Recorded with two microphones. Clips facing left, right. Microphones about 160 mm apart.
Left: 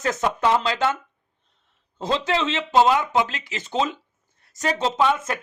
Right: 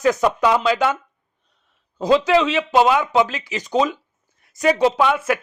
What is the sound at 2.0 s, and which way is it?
Speech, 25° left (ahead or behind).